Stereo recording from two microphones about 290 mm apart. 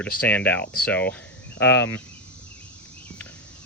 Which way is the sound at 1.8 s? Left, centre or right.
Left.